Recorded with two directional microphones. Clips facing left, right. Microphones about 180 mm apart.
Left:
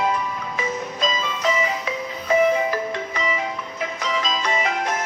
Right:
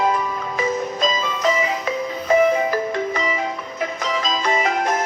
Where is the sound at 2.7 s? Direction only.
40° right (ahead or behind).